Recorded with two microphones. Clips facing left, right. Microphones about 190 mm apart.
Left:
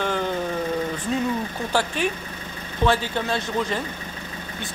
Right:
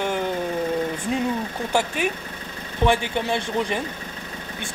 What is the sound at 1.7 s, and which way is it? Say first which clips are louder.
Speech: right 1 dB; 10° right (ahead or behind).